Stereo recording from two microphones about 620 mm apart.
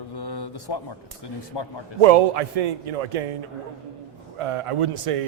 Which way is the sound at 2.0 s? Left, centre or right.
Right.